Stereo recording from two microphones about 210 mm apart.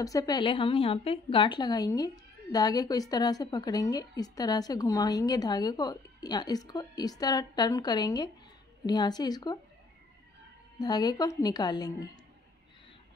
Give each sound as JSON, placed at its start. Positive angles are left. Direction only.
{"t": 0.0, "sound": "a woman's voice", "side_deg": 15}
{"t": 10.8, "sound": "a woman's voice", "side_deg": 20}